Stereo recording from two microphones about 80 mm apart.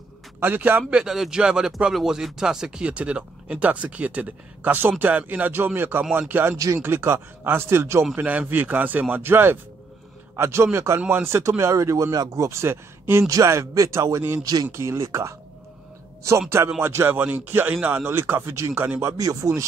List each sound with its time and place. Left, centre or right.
0.4 s speech: right
11.0 s speech: right
14.4 s speech: right
14.7 s speech: right